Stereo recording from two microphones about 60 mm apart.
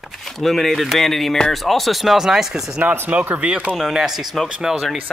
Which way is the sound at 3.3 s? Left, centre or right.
Right.